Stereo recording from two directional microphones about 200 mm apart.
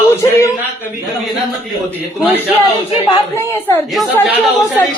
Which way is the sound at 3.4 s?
10° left (ahead or behind).